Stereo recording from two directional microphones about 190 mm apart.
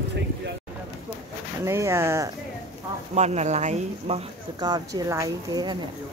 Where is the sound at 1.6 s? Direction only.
15° right (ahead or behind).